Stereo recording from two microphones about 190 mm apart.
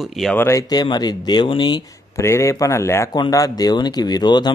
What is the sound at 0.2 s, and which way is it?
Speech, 5° left (ahead or behind).